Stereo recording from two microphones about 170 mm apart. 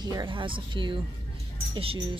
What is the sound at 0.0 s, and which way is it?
Speech, 25° right (ahead or behind).